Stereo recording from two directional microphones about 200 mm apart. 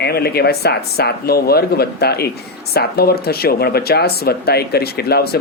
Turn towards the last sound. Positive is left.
turn(degrees=50)  # may be behind; listen again after turning